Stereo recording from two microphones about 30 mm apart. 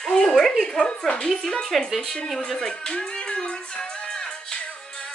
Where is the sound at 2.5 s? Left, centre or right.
Left.